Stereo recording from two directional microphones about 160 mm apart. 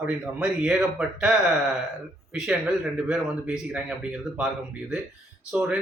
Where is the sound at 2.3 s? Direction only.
5° right (ahead or behind).